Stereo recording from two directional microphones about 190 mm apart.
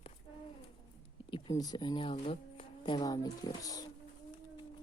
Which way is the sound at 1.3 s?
20° left (ahead or behind).